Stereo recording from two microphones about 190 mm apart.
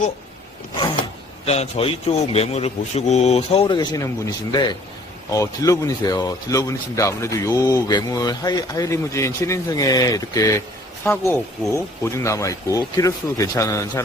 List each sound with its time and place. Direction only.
1.5 s a man's voice: 35° left (ahead or behind); by 14.0 s 15° left (ahead or behind)